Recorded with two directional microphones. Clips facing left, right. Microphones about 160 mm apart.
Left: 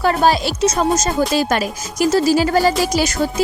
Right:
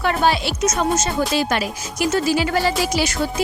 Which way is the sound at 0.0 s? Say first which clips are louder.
Left 3 dB; 40° left (ahead or behind).